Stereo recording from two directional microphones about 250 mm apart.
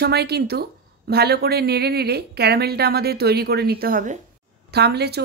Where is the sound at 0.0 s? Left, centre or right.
Right.